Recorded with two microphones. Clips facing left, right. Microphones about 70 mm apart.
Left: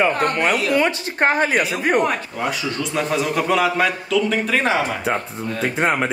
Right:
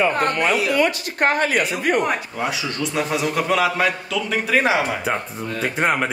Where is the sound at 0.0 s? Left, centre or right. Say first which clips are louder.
Left 1 dB; centre.